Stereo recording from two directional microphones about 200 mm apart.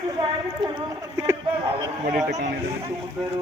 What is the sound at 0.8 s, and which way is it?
Speech, 20° right (ahead or behind).